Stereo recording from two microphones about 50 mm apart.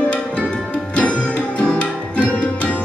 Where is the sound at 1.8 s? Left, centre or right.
Left.